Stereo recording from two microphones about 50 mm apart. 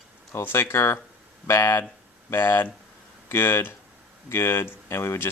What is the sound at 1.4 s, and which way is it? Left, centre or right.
Speech, left.